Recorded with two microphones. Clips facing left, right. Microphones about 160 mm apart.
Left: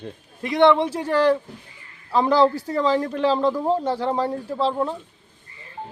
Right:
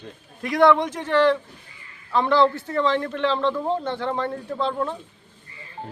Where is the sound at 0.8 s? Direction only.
35° left (ahead or behind).